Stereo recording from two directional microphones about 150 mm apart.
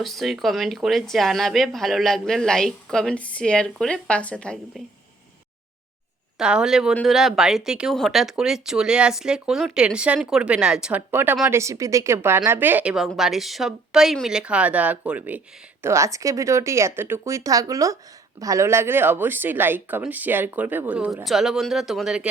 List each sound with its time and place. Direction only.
0.0 s speech: centre (ahead or behind)
6.4 s a woman's voice: 5° right (ahead or behind)